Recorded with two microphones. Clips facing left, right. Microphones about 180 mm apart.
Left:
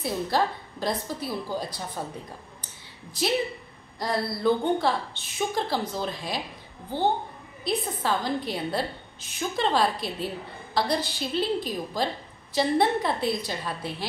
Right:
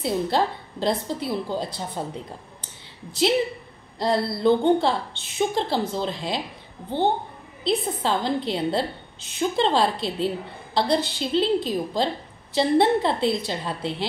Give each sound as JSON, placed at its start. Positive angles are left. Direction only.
{"t": 0.0, "sound": "a woman's voice", "side_deg": -25}
{"t": 4.0, "sound": "a woman's voice", "side_deg": -25}